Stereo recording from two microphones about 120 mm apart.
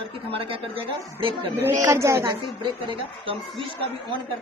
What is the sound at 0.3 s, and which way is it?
Speech, 50° right (ahead or behind).